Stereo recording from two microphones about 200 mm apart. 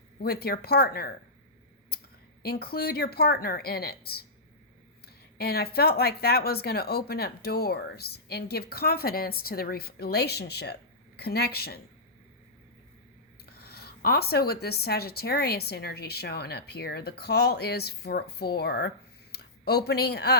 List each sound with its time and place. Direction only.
0.2 s speech: 50° left (ahead or behind)
1.9 s a sound: 50° left (ahead or behind)
2.4 s speech: 50° left (ahead or behind)
13.4 s speech: 50° left (ahead or behind)